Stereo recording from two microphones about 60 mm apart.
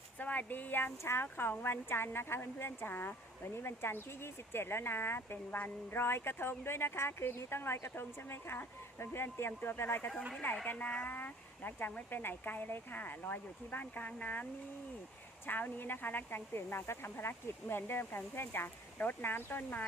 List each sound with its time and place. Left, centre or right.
0.2 s speech: left
10.7 s speech: left
11.1 s speech: left
11.9 s speech: left
15.4 s speech: left